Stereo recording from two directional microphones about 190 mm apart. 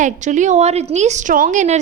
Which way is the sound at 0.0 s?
40° right (ahead or behind).